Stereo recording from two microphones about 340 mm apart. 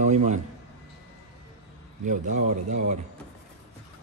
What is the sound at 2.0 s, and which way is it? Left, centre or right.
Speech, right.